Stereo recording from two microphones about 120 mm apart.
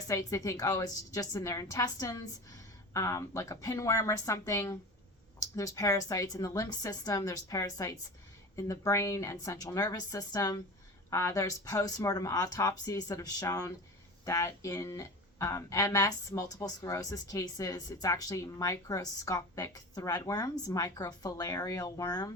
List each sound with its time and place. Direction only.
0.1 s speech: 25° left (ahead or behind)